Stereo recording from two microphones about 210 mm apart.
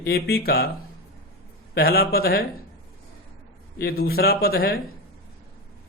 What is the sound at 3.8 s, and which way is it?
Speech, 45° left (ahead or behind).